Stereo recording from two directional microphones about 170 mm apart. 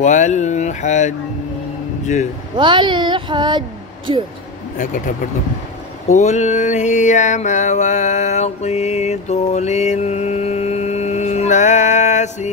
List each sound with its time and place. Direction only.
0.0 s speech: 45° left (ahead or behind)
2.5 s speech: 30° right (ahead or behind)
4.7 s speech: 50° left (ahead or behind)
6.0 s a sound: 45° left (ahead or behind)